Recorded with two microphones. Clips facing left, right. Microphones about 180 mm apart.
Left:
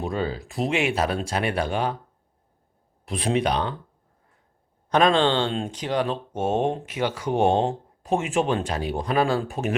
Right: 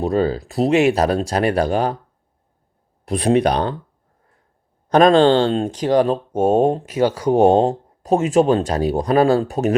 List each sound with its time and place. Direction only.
0.0 s speech: 40° right (ahead or behind)
3.1 s speech: 40° right (ahead or behind)
4.9 s speech: 40° right (ahead or behind)